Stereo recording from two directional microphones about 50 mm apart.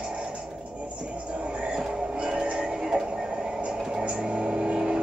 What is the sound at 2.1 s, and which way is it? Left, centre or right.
Music, right.